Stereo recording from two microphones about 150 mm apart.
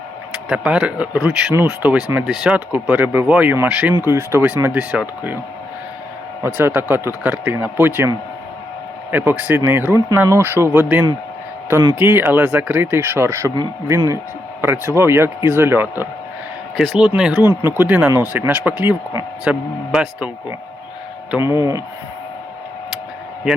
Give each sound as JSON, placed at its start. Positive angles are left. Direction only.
{"t": 0.4, "sound": "speech", "side_deg": -5}
{"t": 6.4, "sound": "speech", "side_deg": -15}
{"t": 9.1, "sound": "speech", "side_deg": -10}
{"t": 16.7, "sound": "speech", "side_deg": 0}